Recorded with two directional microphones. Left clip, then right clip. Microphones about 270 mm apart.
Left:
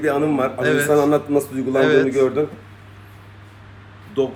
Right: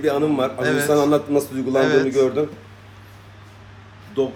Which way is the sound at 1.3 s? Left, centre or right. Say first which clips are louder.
Left 1 dB; centre.